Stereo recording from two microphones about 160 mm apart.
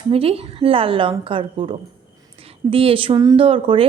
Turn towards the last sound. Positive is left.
turn(degrees=-35)  # may be behind; listen again after turning